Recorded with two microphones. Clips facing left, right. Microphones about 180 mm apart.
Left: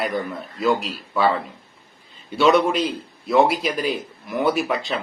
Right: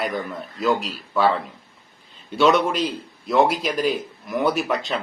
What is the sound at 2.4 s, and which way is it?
Speech, 5° left (ahead or behind).